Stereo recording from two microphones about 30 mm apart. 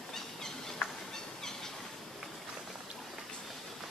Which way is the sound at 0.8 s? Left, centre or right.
Left.